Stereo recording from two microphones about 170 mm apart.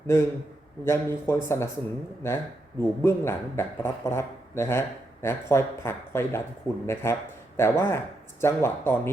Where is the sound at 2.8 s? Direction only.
15° left (ahead or behind).